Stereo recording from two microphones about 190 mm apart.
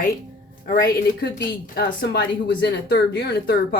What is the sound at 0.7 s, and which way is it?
Speech, 55° left (ahead or behind).